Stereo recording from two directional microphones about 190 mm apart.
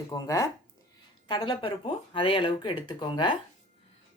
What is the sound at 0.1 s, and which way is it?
Speech, 20° left (ahead or behind).